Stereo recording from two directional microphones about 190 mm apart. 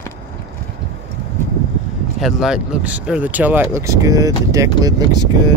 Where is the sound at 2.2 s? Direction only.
5° right (ahead or behind); by 5.3 s 20° right (ahead or behind).